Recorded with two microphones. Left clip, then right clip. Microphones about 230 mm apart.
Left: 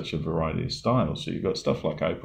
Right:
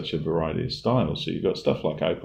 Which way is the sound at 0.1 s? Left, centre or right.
Left.